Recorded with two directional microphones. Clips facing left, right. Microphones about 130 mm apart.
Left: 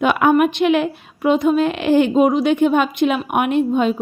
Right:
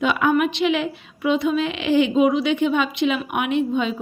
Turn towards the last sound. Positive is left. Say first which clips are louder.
# left 4 dB
turn(degrees=50)  # may be behind; listen again after turning